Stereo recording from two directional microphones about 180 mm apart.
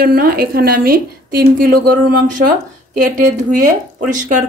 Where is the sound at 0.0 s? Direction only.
55° right (ahead or behind).